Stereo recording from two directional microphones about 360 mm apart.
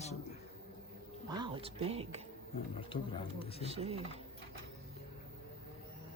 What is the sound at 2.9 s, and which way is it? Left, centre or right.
Speech, left.